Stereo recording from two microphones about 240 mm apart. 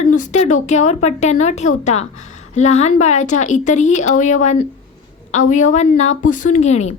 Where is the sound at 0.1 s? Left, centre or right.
Left.